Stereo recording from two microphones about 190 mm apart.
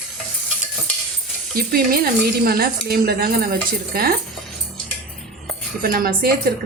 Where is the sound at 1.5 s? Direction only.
50° right (ahead or behind).